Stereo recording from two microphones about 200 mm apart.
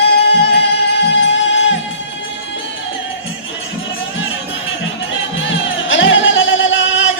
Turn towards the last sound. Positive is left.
turn(degrees=70)  # may be behind; listen again after turning